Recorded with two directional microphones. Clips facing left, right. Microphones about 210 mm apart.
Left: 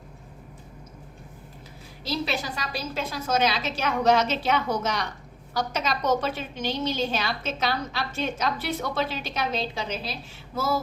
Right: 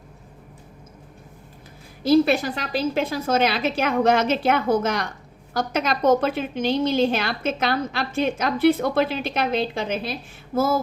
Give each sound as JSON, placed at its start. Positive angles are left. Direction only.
{"t": 2.0, "sound": "a woman's voice", "side_deg": -55}